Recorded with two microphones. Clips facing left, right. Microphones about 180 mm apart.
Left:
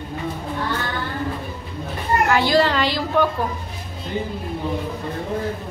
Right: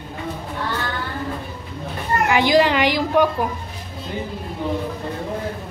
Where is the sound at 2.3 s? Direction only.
15° right (ahead or behind).